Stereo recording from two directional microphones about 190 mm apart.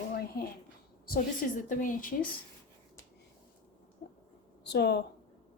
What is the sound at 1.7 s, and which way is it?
Speech, 45° left (ahead or behind).